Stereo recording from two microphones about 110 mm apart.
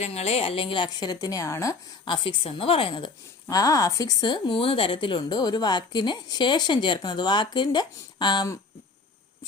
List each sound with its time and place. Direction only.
0.0 s a woman's voice: 75° left (ahead or behind); by 1.7 s 30° left (ahead or behind)
2.0 s a woman's voice: 50° left (ahead or behind)
3.5 s a woman's voice: 30° left (ahead or behind)